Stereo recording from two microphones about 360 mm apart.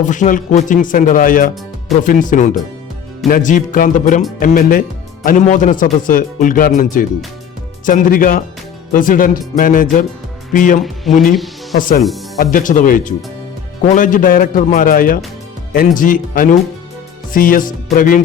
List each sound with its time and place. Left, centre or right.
0.0 s a man's voice: left
7.9 s a man's voice: left